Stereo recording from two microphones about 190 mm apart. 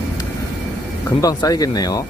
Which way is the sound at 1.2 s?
20° left (ahead or behind).